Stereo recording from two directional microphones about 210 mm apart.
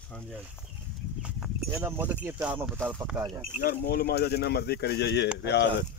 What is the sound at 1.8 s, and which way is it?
Speech, 10° right (ahead or behind).